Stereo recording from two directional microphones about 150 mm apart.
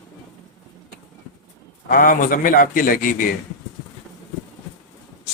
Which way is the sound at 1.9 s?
65° left (ahead or behind).